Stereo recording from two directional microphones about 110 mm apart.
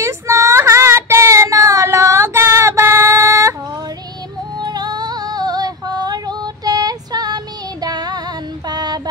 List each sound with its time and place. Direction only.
0.0 s child singing: 25° right (ahead or behind)
4.6 s female singing: 40° right (ahead or behind)
8.6 s mantra: 40° right (ahead or behind)